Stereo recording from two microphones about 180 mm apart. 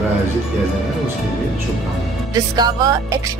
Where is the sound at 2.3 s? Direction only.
20° right (ahead or behind).